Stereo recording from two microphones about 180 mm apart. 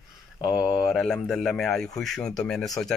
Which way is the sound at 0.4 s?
20° left (ahead or behind).